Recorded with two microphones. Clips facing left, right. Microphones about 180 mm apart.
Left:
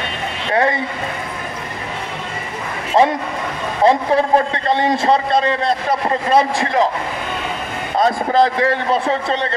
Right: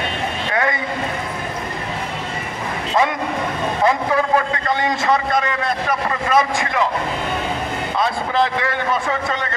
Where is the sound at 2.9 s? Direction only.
30° left (ahead or behind).